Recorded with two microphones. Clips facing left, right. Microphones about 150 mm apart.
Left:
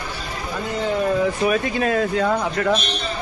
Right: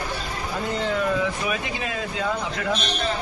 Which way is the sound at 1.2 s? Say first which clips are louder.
Left 7 dB; 50° left (ahead or behind).